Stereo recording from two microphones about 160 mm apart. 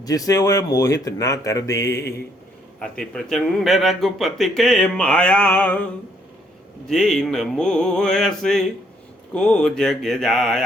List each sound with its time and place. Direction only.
0.0 s speech: 20° left (ahead or behind)
2.7 s a man's voice: 5° left (ahead or behind)